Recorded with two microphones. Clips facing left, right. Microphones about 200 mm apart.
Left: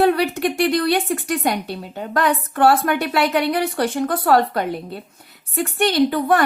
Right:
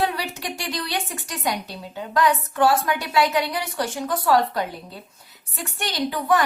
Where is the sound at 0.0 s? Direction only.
60° left (ahead or behind).